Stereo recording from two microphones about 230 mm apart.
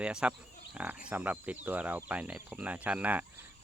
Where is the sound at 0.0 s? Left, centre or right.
Centre.